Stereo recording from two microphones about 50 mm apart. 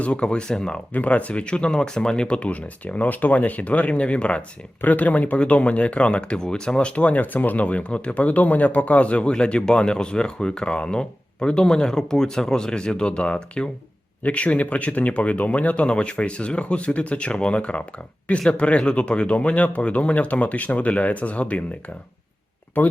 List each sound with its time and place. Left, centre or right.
0.0 s speech: left
0.9 s speech: left
4.8 s speech: left